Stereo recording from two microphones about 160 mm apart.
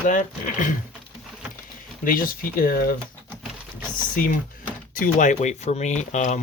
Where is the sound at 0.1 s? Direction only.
55° left (ahead or behind).